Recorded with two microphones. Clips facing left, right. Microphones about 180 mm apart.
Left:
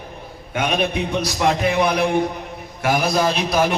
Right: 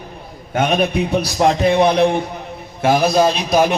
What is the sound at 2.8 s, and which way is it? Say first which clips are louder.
Speech: right 5 dB; 25° right (ahead or behind).